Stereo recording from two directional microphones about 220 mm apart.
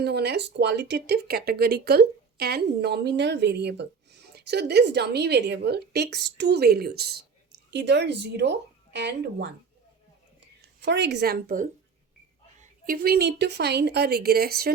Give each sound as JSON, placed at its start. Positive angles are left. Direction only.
{"t": 0.0, "sound": "a woman's voice", "side_deg": -50}
{"t": 10.8, "sound": "a woman's voice", "side_deg": -50}